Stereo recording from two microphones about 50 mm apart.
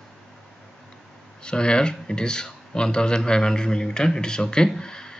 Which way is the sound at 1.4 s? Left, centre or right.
Centre.